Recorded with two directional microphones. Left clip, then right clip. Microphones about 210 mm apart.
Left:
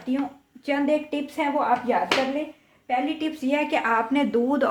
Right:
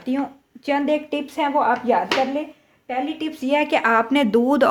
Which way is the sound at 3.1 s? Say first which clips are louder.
Right 4 dB; 45° right (ahead or behind).